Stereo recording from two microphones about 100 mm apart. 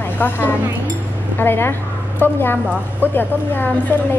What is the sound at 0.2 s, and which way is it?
Speech, 20° left (ahead or behind).